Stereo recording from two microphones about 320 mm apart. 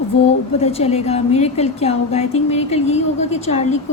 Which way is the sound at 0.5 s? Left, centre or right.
Centre.